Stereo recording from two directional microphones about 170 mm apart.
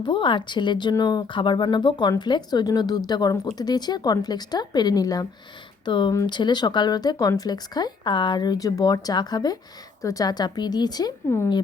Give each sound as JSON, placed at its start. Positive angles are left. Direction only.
{"t": 0.0, "sound": "speech", "side_deg": 30}